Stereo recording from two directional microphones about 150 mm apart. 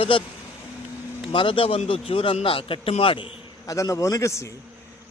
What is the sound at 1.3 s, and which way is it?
A man's voice, 35° left (ahead or behind).